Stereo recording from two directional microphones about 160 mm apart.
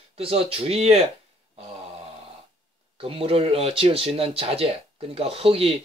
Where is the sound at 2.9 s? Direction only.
35° right (ahead or behind).